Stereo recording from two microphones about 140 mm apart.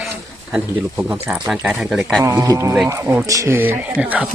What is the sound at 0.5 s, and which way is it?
Speech, 10° right (ahead or behind).